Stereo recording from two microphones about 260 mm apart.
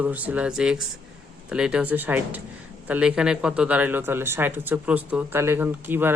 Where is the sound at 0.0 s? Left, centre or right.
Centre.